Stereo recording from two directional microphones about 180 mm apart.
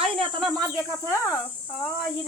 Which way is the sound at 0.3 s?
5° left (ahead or behind).